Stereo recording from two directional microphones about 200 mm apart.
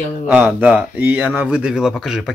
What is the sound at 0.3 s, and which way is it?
Speech, 10° right (ahead or behind).